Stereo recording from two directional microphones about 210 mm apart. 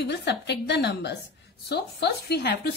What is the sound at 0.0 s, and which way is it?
A woman's voice, 55° left (ahead or behind).